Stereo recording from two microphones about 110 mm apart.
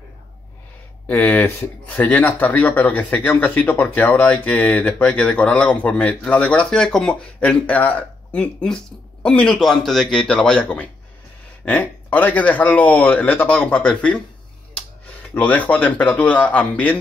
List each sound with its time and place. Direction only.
1.0 s speech: 15° left (ahead or behind)